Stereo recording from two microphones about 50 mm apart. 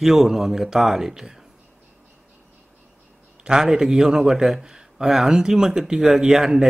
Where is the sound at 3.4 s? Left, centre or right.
Centre.